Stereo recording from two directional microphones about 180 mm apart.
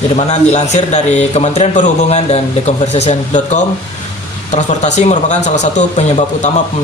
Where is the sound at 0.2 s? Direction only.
40° left (ahead or behind).